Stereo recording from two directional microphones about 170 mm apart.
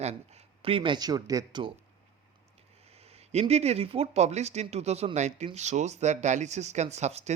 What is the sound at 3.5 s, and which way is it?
Speech, 40° right (ahead or behind).